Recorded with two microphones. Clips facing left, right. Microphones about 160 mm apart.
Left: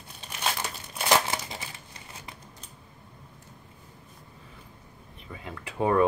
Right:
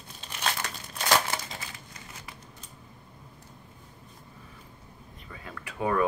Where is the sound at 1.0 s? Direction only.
20° left (ahead or behind).